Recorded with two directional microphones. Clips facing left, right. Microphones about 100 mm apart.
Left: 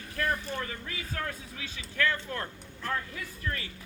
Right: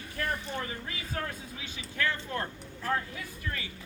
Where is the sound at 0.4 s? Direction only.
20° right (ahead or behind).